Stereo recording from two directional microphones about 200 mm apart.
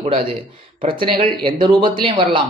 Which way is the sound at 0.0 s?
30° right (ahead or behind).